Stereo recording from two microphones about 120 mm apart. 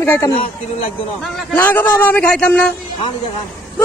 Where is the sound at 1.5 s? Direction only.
15° left (ahead or behind).